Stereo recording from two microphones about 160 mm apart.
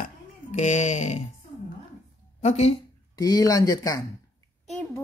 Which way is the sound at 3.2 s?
20° left (ahead or behind).